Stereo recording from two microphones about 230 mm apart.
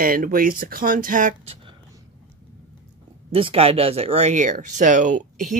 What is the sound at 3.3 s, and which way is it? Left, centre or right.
Speech, right.